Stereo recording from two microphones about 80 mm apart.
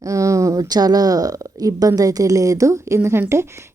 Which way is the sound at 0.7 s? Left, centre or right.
Right.